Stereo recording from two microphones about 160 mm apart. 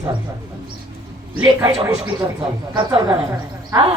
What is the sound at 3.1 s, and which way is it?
Speech, 20° right (ahead or behind).